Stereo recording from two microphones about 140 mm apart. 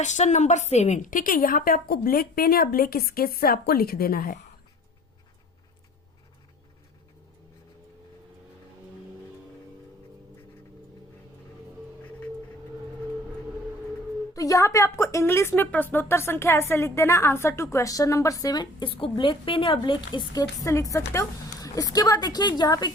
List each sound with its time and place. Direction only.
0.0 s a woman's voice: 55° left (ahead or behind); by 4.4 s 90° left
14.3 s speech: 25° left (ahead or behind)